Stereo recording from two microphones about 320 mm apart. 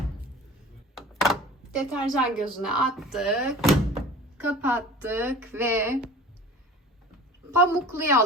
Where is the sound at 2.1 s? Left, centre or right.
Centre.